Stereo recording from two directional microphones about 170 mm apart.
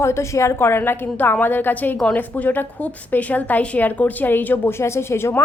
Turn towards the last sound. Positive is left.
turn(degrees=15)  # may be behind; listen again after turning